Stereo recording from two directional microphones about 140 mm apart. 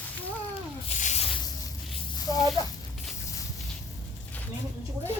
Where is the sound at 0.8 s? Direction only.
55° left (ahead or behind).